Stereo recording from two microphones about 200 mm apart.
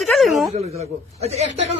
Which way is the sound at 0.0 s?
Centre (ahead or behind).